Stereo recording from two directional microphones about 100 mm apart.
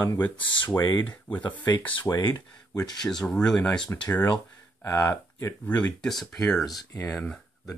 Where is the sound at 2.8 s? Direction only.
5° left (ahead or behind).